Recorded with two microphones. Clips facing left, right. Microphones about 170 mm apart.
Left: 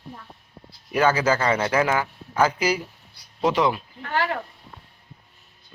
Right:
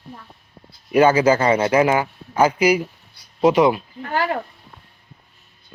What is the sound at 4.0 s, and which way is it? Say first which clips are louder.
Speech: right 3 dB; 35° right (ahead or behind).